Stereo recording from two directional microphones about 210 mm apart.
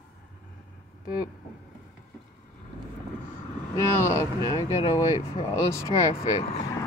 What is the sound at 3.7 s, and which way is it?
Speech, 15° left (ahead or behind).